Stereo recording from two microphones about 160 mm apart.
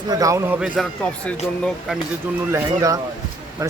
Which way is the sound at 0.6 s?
5° left (ahead or behind).